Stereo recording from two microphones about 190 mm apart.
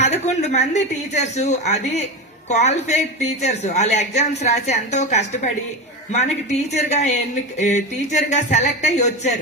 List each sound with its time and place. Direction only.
0.3 s speech: 35° left (ahead or behind)